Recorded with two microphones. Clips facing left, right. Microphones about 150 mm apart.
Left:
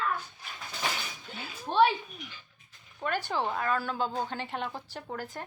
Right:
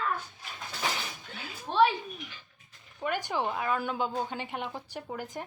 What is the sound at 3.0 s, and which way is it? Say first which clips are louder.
Speech: even; 15° right (ahead or behind).